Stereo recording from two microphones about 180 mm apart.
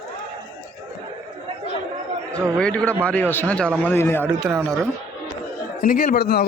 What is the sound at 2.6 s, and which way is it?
A man's voice, 5° left (ahead or behind).